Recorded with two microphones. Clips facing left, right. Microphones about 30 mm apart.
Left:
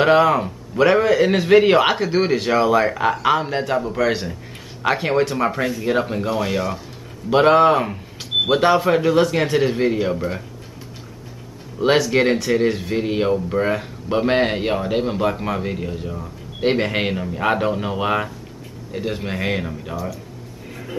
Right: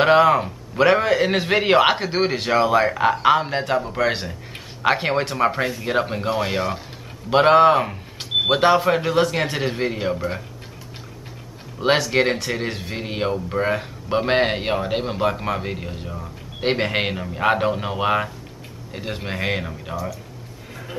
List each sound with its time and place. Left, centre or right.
0.0 s a man's voice: centre
11.8 s a man's voice: centre